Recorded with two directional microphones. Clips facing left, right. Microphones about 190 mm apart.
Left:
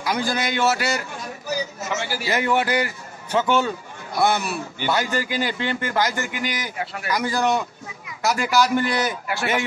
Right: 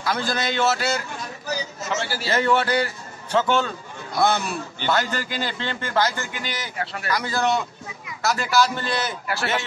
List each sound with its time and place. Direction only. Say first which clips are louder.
0.0 s a man's voice: left 1 dB; 15° left (ahead or behind)